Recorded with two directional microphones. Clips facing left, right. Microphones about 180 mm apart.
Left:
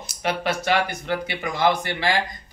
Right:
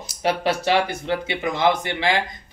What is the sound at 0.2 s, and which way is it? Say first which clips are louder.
Speech: right 3 dB; 35° right (ahead or behind).